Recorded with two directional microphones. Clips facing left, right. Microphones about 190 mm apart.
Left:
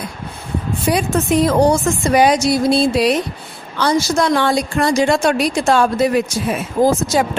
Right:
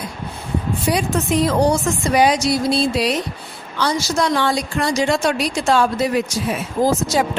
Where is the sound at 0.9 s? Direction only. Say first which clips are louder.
Left 3 dB; 50° left (ahead or behind).